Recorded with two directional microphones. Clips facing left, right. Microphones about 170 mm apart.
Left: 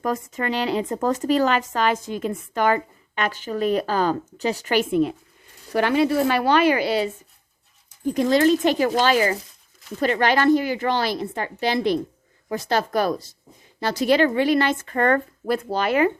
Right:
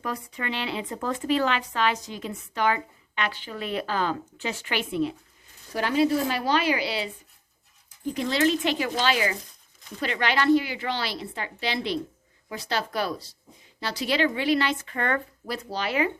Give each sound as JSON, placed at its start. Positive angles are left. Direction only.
{"t": 0.0, "sound": "speech", "side_deg": 45}
{"t": 5.7, "sound": "a woman's voice", "side_deg": 65}